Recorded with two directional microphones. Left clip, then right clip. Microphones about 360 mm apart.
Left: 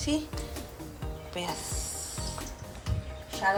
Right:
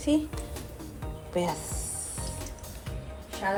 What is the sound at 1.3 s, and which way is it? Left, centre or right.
Speech, centre.